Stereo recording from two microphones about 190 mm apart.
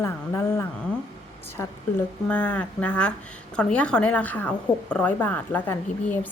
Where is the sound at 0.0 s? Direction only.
15° left (ahead or behind).